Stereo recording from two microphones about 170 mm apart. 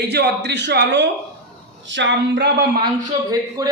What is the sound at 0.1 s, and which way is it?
Speech, 85° right.